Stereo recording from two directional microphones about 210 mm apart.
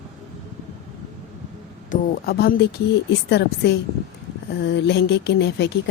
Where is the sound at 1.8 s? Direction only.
45° left (ahead or behind).